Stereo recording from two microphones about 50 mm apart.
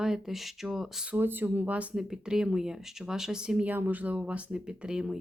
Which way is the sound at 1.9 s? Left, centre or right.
Centre.